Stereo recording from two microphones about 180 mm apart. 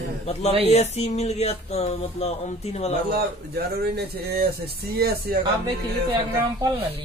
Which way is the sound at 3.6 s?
60° right (ahead or behind).